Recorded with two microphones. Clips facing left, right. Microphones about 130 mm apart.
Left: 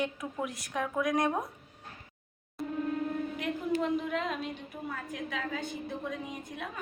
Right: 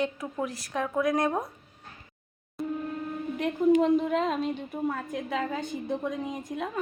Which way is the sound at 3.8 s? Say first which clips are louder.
Right 7 dB; 35° right (ahead or behind).